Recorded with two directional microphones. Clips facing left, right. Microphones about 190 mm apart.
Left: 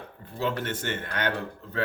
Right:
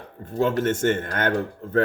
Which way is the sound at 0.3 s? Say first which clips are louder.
Right 8 dB; 45° right (ahead or behind).